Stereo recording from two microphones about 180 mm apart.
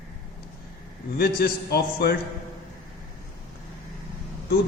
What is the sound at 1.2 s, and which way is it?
Speech, 60° left (ahead or behind).